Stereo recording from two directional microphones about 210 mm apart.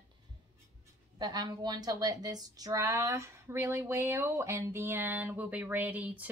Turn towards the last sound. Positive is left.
turn(degrees=-5)  # may be behind; listen again after turning